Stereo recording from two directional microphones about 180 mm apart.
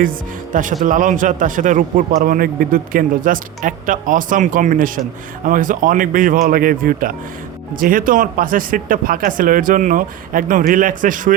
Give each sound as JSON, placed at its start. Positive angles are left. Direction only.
{"t": 0.0, "sound": "speech", "side_deg": -50}